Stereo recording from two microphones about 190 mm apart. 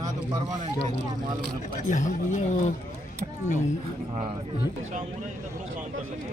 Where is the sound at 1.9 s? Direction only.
40° left (ahead or behind).